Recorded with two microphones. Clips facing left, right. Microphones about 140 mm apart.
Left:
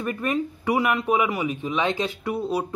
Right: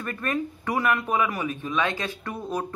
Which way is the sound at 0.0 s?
15° left (ahead or behind).